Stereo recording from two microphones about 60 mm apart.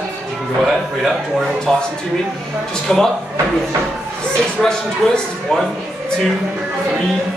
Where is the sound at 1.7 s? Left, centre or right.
Centre.